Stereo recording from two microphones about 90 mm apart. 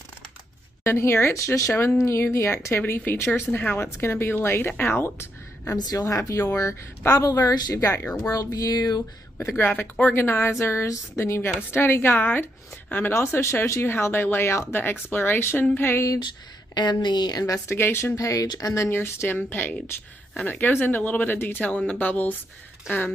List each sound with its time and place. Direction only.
0.8 s a woman's voice: 30° left (ahead or behind)
5.8 s speech: 40° left (ahead or behind)
7.4 s a sound: 45° left (ahead or behind)
9.4 s speech: 30° left (ahead or behind)
9.7 s a woman's voice: 20° left (ahead or behind)
16.7 s a sound: 55° left (ahead or behind)
17.6 s a woman's voice: 25° left (ahead or behind)
18.1 s speech: 40° left (ahead or behind)
18.9 s a woman's voice: 30° left (ahead or behind)